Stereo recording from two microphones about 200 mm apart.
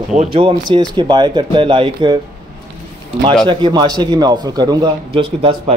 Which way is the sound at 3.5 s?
25° right (ahead or behind).